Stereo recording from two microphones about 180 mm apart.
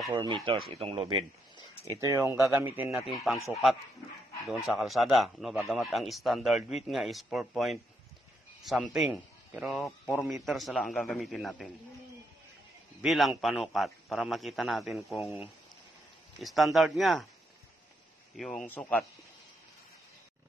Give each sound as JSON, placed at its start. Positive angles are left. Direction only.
{"t": 0.1, "sound": "speech", "side_deg": -25}
{"t": 0.7, "sound": "speech", "side_deg": -35}
{"t": 2.0, "sound": "speech", "side_deg": -15}
{"t": 13.0, "sound": "speech", "side_deg": 0}
{"t": 18.3, "sound": "speech", "side_deg": 0}